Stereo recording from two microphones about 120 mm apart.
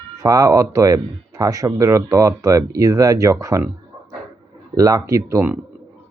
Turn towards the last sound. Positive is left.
turn(degrees=-25)  # may be behind; listen again after turning